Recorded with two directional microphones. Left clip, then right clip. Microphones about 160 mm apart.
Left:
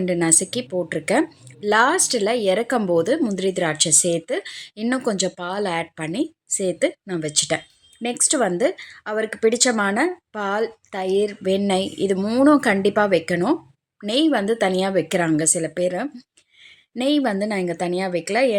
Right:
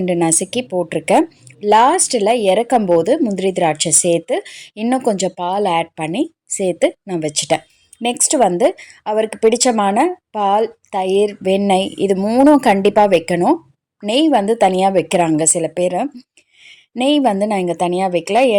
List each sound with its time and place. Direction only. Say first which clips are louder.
0.0 s a woman's voice: right 4 dB; 10° right (ahead or behind)
7.3 s speech: even; 35° left (ahead or behind)
8.0 s a woman's voice: right 7 dB; 15° right (ahead or behind)